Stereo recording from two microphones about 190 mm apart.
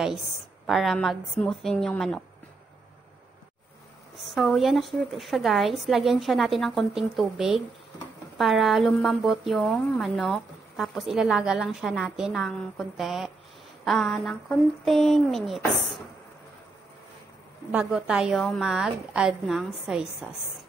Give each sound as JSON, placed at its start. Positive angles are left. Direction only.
{"t": 0.7, "sound": "speech", "side_deg": 0}
{"t": 4.2, "sound": "speech", "side_deg": 0}
{"t": 17.6, "sound": "speech", "side_deg": -5}